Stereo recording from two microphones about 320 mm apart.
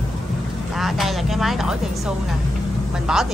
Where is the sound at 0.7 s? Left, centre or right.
Centre.